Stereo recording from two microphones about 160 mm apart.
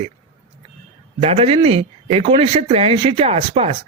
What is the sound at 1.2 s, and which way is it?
A woman's voice, 40° right (ahead or behind).